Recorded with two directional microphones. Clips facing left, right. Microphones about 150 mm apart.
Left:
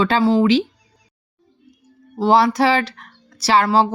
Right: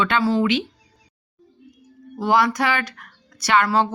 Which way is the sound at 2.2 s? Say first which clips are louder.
Left 4 dB; 30° left (ahead or behind).